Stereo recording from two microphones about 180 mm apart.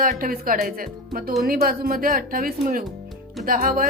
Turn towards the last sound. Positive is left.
turn(degrees=-50)  # may be behind; listen again after turning